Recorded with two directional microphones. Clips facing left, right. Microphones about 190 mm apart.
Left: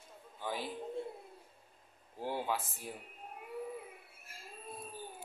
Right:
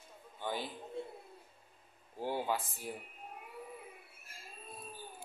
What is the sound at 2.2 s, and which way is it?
Speech, centre (ahead or behind).